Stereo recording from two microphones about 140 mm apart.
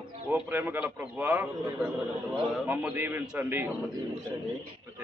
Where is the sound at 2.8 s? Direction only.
15° right (ahead or behind).